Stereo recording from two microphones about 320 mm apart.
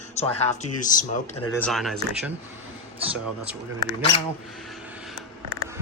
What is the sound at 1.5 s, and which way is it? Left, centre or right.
Speech, centre.